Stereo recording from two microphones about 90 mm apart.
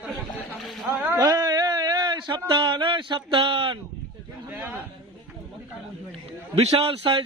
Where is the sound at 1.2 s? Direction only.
45° right (ahead or behind).